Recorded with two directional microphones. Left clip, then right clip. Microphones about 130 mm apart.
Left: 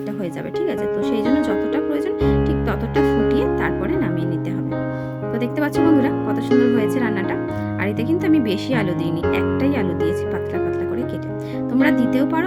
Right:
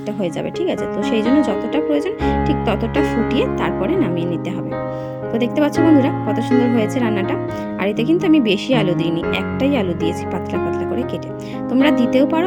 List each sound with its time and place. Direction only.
1.0 s speech: 15° right (ahead or behind)
5.4 s speech: 20° right (ahead or behind)
11.7 s speech: 20° right (ahead or behind)